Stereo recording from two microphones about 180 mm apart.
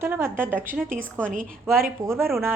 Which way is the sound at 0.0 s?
15° right (ahead or behind).